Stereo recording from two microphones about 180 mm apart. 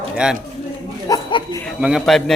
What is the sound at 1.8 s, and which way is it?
Speech, centre (ahead or behind).